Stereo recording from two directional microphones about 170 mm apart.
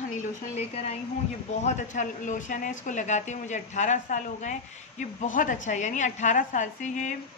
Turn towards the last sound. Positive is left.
turn(degrees=45)  # may be behind; listen again after turning